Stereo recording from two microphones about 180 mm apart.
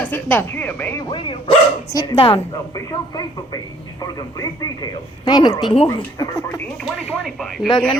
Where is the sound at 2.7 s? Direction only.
20° left (ahead or behind).